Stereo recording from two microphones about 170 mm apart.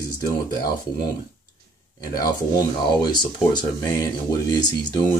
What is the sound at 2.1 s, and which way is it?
Speech, 25° left (ahead or behind).